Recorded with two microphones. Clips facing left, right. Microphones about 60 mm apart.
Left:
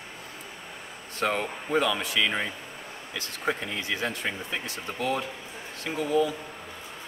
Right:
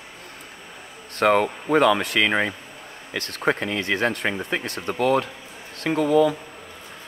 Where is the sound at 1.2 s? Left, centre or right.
Right.